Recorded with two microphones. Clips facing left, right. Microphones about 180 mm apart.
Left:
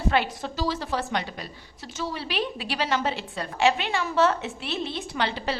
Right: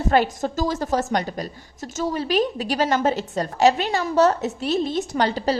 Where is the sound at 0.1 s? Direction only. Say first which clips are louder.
Right 7 dB; 45° right (ahead or behind).